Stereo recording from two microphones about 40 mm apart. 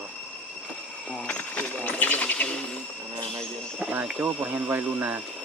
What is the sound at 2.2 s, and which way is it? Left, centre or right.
Bird, left.